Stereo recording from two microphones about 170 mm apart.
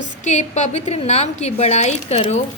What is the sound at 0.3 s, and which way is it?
A woman's voice, 45° left (ahead or behind).